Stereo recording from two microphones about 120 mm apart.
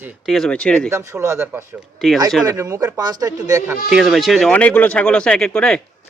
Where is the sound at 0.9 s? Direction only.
25° right (ahead or behind).